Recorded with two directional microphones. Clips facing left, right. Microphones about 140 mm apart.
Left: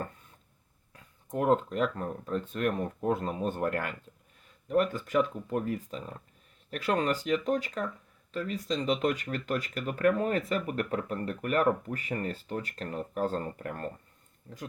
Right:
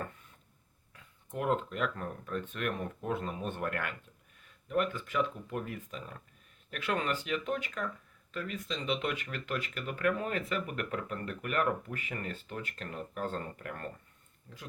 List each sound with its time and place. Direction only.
0.9 s speech: 40° left (ahead or behind)